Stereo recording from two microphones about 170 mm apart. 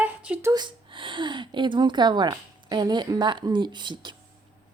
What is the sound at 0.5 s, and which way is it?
A woman's voice, 25° right (ahead or behind).